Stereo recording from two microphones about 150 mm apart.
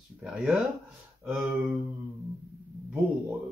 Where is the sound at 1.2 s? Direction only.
15° right (ahead or behind).